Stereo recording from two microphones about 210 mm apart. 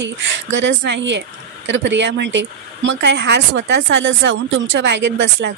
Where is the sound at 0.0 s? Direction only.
60° right (ahead or behind).